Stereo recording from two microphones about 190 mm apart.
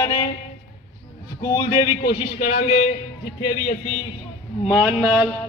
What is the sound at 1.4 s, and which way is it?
A man's voice, 20° left (ahead or behind).